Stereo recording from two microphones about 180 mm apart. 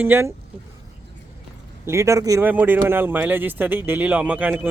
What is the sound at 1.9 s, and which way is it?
Speech, 15° right (ahead or behind).